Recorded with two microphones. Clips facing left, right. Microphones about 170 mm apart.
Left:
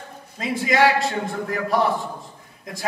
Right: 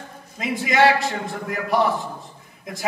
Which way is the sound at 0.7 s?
20° right (ahead or behind).